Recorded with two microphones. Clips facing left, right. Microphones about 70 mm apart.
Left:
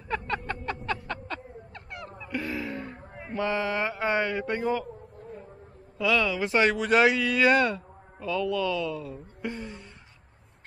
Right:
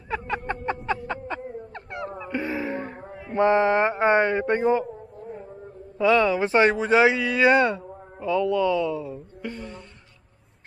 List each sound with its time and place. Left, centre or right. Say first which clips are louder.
0.1 s a sound: right 2 dB; centre
0.5 s a sound: right 5 dB; right
1.7 s dog: right 8 dB; right
2.2 s music: right 3 dB; right
3.3 s speech: right 9 dB; right
5.9 s speech: right 6 dB; right
9.4 s speech: left 1 dB; centre